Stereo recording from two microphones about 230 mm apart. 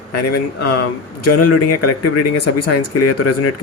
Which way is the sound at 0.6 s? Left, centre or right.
Left.